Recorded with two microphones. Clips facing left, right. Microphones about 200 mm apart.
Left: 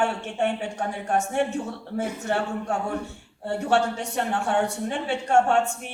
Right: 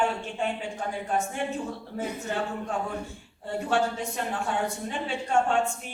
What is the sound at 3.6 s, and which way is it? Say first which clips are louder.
Speech: left 3 dB; 70° left (ahead or behind).